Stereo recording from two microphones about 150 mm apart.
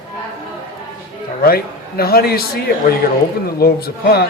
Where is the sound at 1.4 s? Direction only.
90° left.